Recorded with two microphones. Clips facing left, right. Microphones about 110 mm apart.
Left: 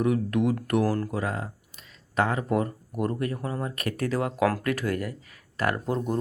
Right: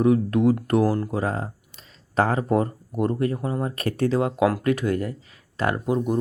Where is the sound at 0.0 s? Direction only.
30° right (ahead or behind).